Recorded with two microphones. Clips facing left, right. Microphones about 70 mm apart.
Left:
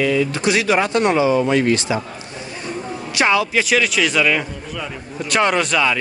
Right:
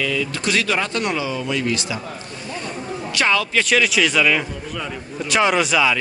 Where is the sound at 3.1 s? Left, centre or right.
Centre.